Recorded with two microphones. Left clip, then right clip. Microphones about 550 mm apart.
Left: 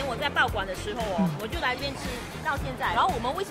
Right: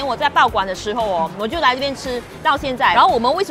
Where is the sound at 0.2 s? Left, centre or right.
Right.